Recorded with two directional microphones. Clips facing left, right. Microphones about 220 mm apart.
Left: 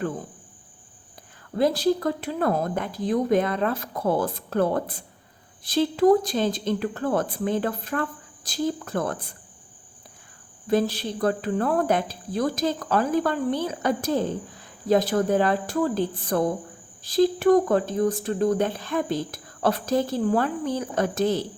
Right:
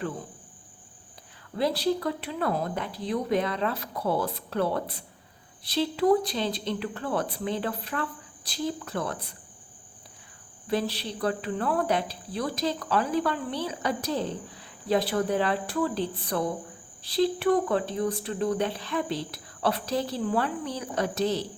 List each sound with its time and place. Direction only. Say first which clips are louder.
1.5 s speech: left 4 dB; 45° left (ahead or behind)
10.7 s speech: left 6 dB; 45° left (ahead or behind)